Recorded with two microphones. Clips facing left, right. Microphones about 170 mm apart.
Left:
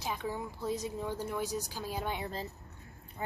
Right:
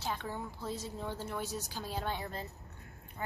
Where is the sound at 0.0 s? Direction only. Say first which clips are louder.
Left 2 dB; 10° left (ahead or behind).